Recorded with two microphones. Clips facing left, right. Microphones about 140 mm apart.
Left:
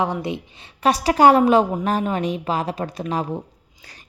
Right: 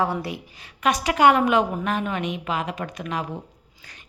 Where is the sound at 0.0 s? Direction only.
20° left (ahead or behind).